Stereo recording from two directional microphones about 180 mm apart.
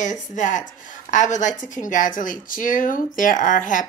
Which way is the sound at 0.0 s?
45° left (ahead or behind).